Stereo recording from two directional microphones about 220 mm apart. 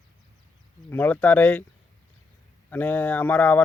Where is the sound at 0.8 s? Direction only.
10° left (ahead or behind).